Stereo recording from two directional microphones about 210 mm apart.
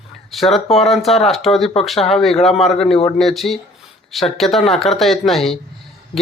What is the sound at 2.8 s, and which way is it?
Speech, 30° left (ahead or behind).